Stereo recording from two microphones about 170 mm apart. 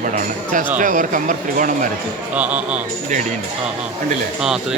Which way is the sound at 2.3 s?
10° right (ahead or behind).